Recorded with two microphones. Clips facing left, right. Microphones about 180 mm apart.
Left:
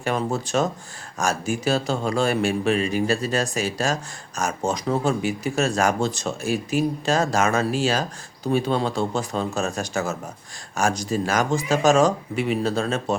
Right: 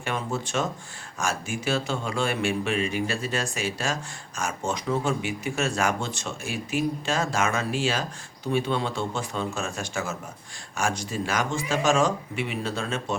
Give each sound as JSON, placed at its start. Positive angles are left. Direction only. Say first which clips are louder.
{"t": 0.0, "sound": "speech", "louder": "left 5 dB", "side_deg": 40}